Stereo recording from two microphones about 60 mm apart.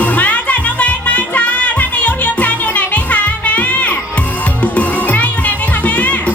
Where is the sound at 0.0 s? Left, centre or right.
Left.